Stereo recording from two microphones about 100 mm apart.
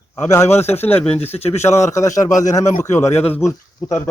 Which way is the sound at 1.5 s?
25° left (ahead or behind).